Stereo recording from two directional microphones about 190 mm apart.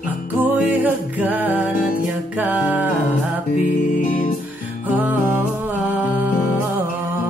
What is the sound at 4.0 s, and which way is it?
Music, 45° left (ahead or behind).